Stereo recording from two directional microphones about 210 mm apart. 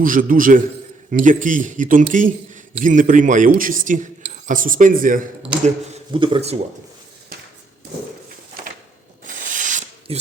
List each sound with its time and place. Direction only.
0.0 s a man's voice: 40° right (ahead or behind)
6.1 s speech: 25° right (ahead or behind)
9.2 s rub: 40° right (ahead or behind)